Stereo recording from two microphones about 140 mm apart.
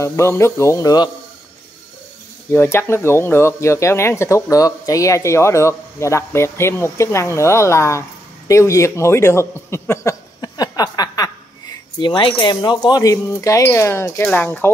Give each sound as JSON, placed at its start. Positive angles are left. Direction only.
{"t": 0.0, "sound": "speech", "side_deg": 20}
{"t": 2.5, "sound": "a man's voice", "side_deg": 15}